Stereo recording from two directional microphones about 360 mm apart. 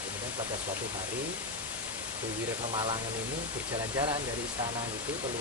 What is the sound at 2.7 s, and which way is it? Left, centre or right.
Speech, centre.